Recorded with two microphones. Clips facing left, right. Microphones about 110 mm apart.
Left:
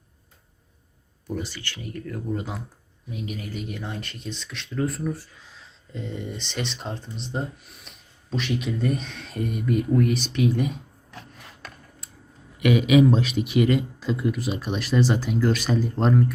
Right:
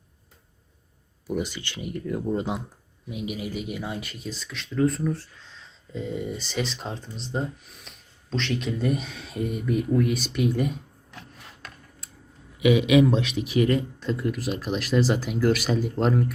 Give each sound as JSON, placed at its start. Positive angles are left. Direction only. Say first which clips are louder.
{"t": 1.3, "sound": "speech", "louder": "right 3 dB", "side_deg": -15}
{"t": 3.1, "sound": "speech", "louder": "right 2 dB", "side_deg": -10}
{"t": 12.9, "sound": "speech", "louder": "left 1 dB", "side_deg": 0}